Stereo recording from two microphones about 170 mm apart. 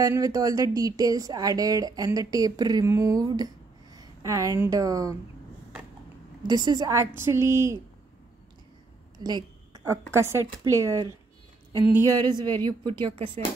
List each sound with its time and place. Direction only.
0.0 s speech: 20° right (ahead or behind)
6.4 s a woman's voice: 25° right (ahead or behind)
9.2 s a woman's voice: 25° right (ahead or behind)
12.2 s speech: 25° right (ahead or behind)